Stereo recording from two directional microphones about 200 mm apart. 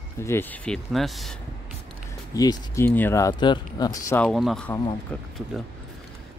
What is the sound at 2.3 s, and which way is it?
Speech, 15° left (ahead or behind).